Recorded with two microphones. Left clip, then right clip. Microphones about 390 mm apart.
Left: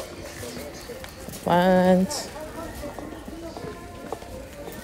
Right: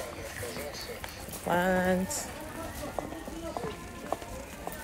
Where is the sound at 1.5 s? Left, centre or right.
Centre.